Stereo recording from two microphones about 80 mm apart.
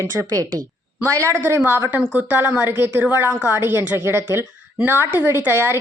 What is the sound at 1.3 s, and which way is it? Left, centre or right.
A woman's voice, right.